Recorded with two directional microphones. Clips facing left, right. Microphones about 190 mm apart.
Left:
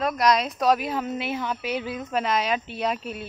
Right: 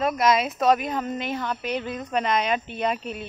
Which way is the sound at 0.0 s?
Centre (ahead or behind).